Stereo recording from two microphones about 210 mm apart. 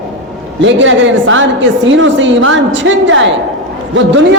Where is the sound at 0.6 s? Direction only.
60° right (ahead or behind).